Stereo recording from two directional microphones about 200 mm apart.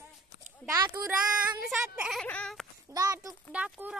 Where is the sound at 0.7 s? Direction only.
15° right (ahead or behind).